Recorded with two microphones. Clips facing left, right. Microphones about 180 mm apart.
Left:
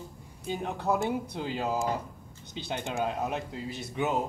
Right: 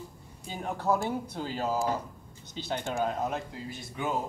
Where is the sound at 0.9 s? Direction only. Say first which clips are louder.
Left 1 dB; 20° left (ahead or behind).